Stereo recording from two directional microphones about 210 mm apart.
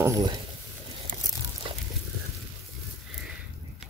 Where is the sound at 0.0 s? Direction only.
15° right (ahead or behind).